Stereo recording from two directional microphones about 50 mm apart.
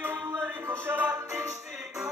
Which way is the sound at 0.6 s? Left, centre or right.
Right.